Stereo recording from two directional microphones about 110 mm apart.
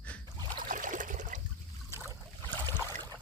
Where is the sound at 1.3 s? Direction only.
90° right.